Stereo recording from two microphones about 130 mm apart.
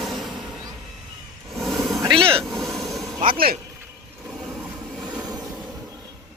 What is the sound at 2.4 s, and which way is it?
Vehicle, centre (ahead or behind).